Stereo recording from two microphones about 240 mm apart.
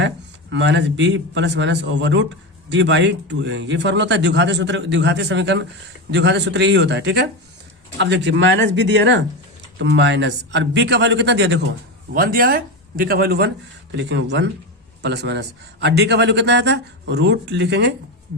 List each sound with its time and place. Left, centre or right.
0.5 s speech: right